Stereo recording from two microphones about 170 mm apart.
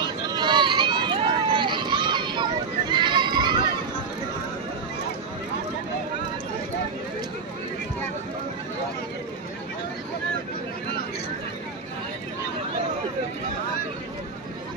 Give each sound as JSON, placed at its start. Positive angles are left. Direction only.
{"t": 0.0, "sound": "run", "side_deg": -25}